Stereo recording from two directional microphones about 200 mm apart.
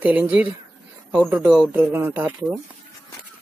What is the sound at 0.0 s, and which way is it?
Speech, 10° right (ahead or behind).